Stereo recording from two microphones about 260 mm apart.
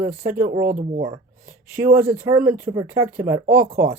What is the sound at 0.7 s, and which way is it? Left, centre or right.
Speech, right.